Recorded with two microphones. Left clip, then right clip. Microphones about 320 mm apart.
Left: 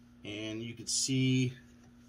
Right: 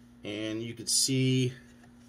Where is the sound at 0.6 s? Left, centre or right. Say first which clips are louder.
Right 6 dB; left.